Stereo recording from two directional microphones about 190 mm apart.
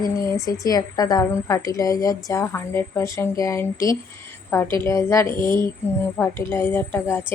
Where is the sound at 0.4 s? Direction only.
20° left (ahead or behind).